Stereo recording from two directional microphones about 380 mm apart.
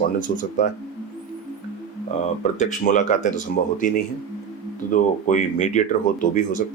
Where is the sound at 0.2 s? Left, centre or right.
Left.